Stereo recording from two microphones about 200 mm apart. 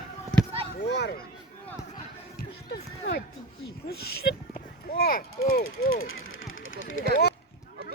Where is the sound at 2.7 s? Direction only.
50° left (ahead or behind).